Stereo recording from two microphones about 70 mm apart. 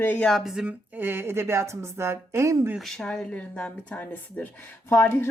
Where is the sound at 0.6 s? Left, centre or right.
Right.